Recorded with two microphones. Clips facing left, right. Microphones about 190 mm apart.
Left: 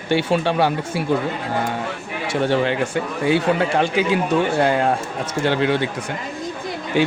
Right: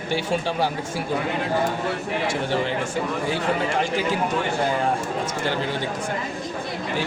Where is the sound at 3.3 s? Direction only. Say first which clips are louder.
Left 10 dB; 70° left (ahead or behind).